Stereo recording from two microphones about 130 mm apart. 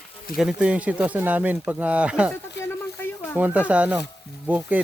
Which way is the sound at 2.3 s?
15° left (ahead or behind).